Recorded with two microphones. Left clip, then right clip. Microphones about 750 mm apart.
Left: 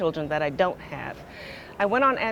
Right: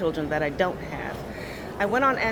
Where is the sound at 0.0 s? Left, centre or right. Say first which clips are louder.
Even; left.